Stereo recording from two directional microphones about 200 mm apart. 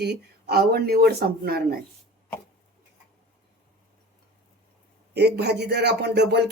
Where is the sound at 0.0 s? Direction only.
55° right (ahead or behind).